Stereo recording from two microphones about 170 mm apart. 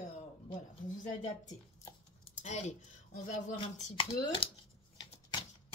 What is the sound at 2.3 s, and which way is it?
Speech, 45° left (ahead or behind).